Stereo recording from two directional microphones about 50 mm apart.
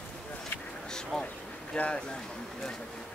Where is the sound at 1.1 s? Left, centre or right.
Centre.